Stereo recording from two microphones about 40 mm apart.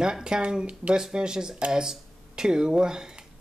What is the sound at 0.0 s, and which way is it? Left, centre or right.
Speech, centre.